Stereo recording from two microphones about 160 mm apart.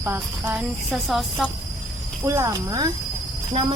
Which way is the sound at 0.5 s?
Centre (ahead or behind).